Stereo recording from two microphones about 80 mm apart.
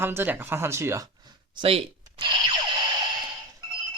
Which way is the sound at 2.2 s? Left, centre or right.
Right.